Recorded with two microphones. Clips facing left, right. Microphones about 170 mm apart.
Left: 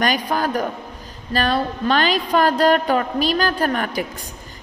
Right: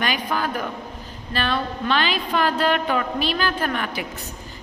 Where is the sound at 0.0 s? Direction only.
45° left (ahead or behind).